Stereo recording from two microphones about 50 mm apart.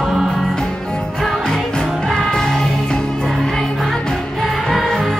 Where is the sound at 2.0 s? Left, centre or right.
Centre.